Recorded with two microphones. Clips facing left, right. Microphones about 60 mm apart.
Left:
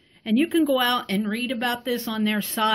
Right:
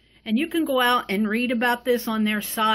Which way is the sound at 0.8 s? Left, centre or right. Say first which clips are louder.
Right 3 dB; right.